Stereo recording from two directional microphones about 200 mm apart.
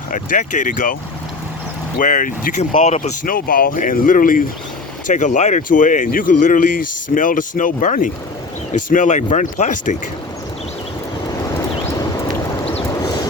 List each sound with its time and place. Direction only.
0.1 s speech: 40° left (ahead or behind)
2.0 s speech: 40° left (ahead or behind)